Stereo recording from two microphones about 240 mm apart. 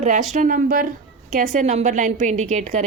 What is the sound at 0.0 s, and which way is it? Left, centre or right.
Speech, right.